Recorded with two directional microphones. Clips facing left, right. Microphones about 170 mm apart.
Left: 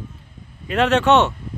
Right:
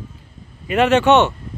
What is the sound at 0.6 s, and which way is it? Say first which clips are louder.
Speech: right 2 dB; 5° right (ahead or behind).